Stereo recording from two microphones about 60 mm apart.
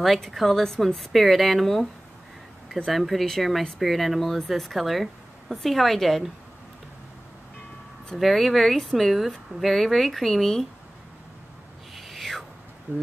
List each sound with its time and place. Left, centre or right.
0.0 s a woman's voice: centre
2.9 s a woman's voice: centre
8.1 s a woman's voice: centre
11.9 s owl: centre
12.9 s speech: right